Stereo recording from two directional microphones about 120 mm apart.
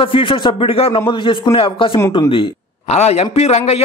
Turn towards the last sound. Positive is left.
turn(degrees=60)  # may be behind; listen again after turning